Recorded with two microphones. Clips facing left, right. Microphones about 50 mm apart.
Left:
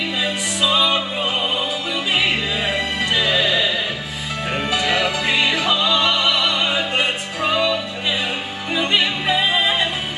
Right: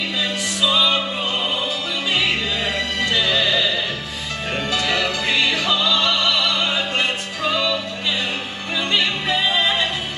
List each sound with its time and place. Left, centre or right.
0.2 s music: centre
2.1 s music: centre